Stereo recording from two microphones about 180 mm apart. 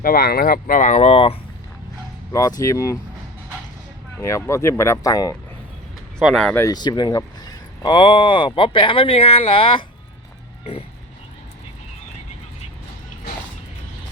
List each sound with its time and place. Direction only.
0.0 s speech: 55° left (ahead or behind); by 1.4 s 35° left (ahead or behind)
2.3 s speech: 20° left (ahead or behind)
4.2 s speech: 15° left (ahead or behind)
6.1 s a man's voice: centre (ahead or behind); by 9.8 s 30° left (ahead or behind)